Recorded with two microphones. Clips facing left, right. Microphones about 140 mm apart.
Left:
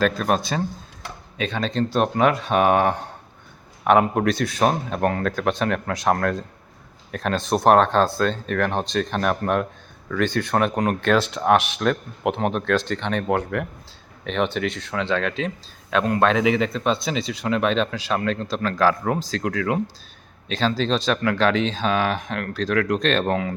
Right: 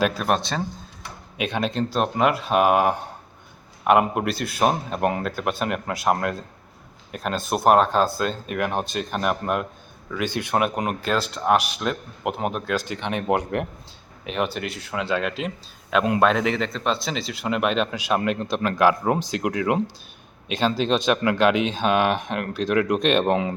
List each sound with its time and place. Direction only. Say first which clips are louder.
0.0 s speech: left 1 dB; 10° right (ahead or behind)
0.3 s speech: left 2 dB; 5° left (ahead or behind)
1.4 s speech: left 1 dB; 10° right (ahead or behind)
14.3 s speech: left 3 dB; 5° right (ahead or behind)
16.3 s speech: left 3 dB; 5° left (ahead or behind); by 23.6 s 20° right (ahead or behind)